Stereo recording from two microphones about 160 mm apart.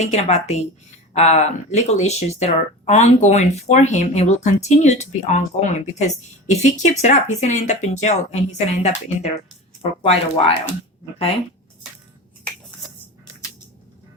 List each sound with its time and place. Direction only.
0.0 s speech: 45° left (ahead or behind)
10.0 s speech: 35° left (ahead or behind)